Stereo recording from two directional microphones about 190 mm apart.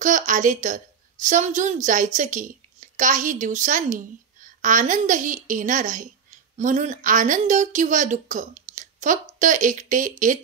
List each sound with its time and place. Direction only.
0.0 s a woman's voice: 40° right (ahead or behind)